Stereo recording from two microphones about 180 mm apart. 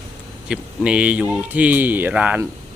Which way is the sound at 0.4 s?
5° right (ahead or behind).